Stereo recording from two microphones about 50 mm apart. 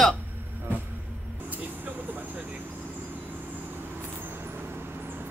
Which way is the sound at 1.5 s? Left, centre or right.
Right.